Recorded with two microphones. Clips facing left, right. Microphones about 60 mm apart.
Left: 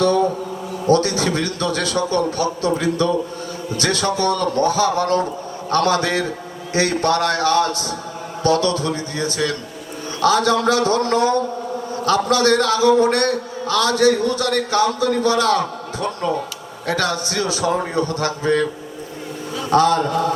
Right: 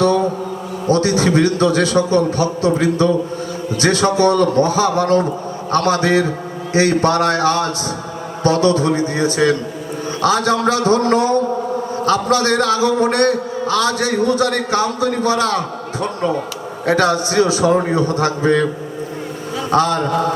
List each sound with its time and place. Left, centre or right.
0.9 s a man's voice: right
16.8 s a man's voice: right
19.7 s a man's voice: right